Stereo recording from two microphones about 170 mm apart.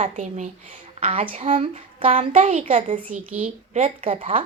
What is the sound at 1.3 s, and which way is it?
Speech, 50° right (ahead or behind).